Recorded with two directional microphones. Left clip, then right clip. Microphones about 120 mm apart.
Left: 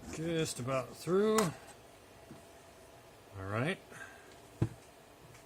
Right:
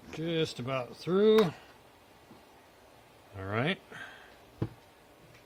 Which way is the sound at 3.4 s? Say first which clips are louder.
Right 4 dB; 80° right.